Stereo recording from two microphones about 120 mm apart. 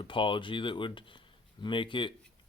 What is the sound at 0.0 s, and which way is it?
Speech, 45° left (ahead or behind).